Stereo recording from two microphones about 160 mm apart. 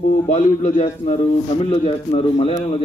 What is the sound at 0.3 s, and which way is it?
Speech, 45° left (ahead or behind).